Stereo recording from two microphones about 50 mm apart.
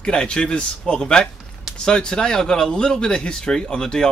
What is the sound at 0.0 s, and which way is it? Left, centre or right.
Speech, centre.